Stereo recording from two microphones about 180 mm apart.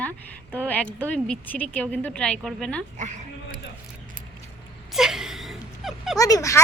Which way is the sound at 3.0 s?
40° right (ahead or behind).